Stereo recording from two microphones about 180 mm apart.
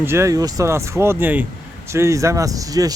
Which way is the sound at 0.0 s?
15° right (ahead or behind).